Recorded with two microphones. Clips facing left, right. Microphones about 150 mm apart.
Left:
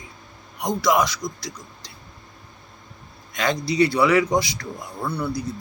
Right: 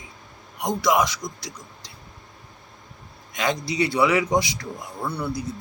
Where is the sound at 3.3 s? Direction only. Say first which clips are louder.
Left 3 dB; 15° right (ahead or behind).